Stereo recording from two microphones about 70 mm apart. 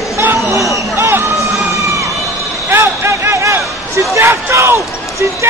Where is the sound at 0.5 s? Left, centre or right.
Right.